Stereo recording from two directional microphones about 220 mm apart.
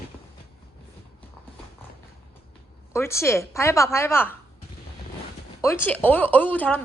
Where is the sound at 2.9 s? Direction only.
10° left (ahead or behind).